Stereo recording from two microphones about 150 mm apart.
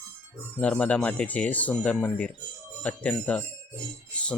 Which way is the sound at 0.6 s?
10° left (ahead or behind).